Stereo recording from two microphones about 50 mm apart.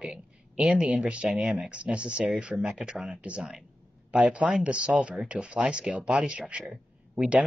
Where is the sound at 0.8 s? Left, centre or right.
Right.